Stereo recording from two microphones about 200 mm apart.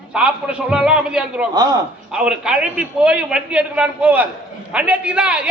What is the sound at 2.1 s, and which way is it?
A man's voice, 5° right (ahead or behind).